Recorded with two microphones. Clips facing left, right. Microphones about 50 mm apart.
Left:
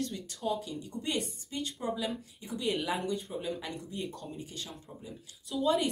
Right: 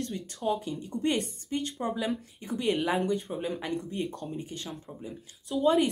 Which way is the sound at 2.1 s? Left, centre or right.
Right.